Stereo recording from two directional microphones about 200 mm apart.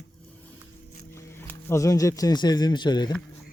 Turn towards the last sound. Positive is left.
turn(degrees=20)  # may be behind; listen again after turning